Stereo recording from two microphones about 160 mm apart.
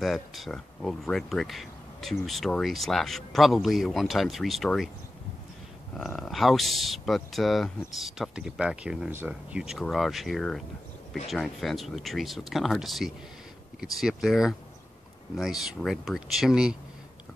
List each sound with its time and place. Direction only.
0.0 s speech: centre (ahead or behind)
5.9 s speech: centre (ahead or behind)